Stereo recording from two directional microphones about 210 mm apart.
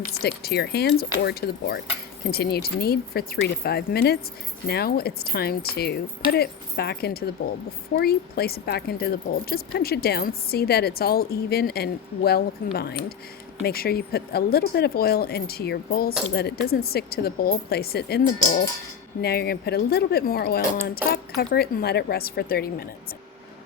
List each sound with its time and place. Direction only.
0.2 s speech: 50° left (ahead or behind)